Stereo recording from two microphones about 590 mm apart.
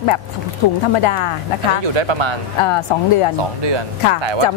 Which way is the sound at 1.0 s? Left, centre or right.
Left.